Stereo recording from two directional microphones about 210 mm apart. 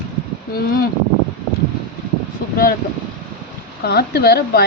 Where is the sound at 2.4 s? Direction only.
45° left (ahead or behind).